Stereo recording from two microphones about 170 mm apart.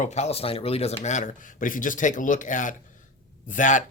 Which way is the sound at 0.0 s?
40° left (ahead or behind).